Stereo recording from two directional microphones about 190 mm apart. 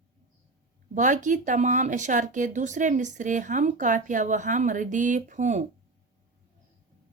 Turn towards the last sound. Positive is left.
turn(degrees=-40)  # may be behind; listen again after turning